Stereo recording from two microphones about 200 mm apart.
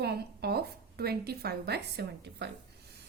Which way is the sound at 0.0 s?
50° right (ahead or behind).